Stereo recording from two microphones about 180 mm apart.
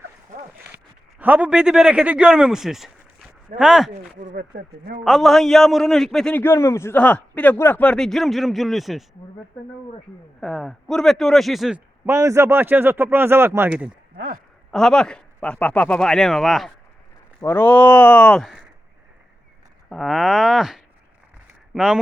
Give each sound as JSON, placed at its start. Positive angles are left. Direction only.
{"t": 1.2, "sound": "a man's voice", "side_deg": -10}
{"t": 4.4, "sound": "speech", "side_deg": -50}
{"t": 5.0, "sound": "a man's voice", "side_deg": 0}
{"t": 10.4, "sound": "a man's voice", "side_deg": 0}
{"t": 12.0, "sound": "speech", "side_deg": -15}
{"t": 14.7, "sound": "a man's voice", "side_deg": 5}
{"t": 17.4, "sound": "speech", "side_deg": 10}
{"t": 19.9, "sound": "a man's voice", "side_deg": 0}